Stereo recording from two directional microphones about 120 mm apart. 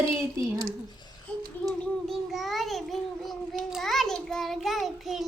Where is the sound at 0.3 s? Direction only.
30° right (ahead or behind).